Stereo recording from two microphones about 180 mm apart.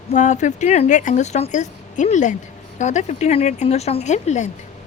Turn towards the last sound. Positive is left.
turn(degrees=40)  # may be behind; listen again after turning